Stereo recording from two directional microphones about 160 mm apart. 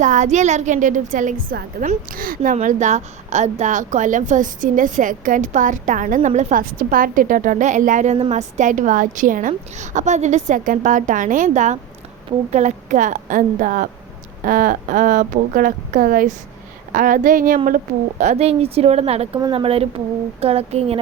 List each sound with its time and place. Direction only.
0.0 s speech: 50° right (ahead or behind)
18.2 s a woman's voice: 45° right (ahead or behind)